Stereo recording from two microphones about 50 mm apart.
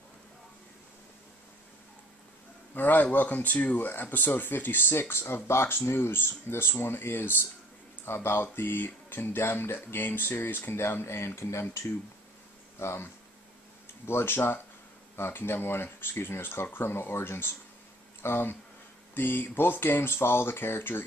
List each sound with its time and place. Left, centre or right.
2.7 s speech: left
12.7 s speech: left